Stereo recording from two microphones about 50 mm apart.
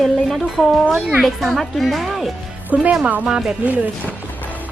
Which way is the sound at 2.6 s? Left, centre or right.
Right.